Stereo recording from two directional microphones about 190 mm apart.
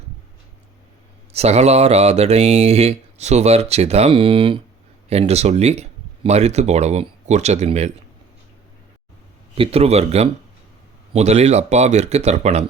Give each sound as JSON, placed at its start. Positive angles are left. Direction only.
{"t": 1.3, "sound": "speech", "side_deg": -35}
{"t": 9.6, "sound": "speech", "side_deg": -30}